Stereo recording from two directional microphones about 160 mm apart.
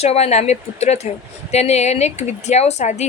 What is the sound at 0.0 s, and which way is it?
A woman's voice, 40° left (ahead or behind).